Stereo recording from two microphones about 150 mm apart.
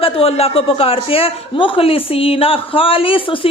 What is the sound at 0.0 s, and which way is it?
A woman's voice, 40° left (ahead or behind).